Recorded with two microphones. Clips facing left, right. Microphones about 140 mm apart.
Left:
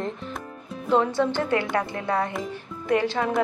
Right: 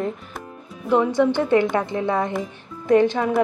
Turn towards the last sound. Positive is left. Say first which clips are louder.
# right 6 dB
turn(degrees=-20)  # may be behind; listen again after turning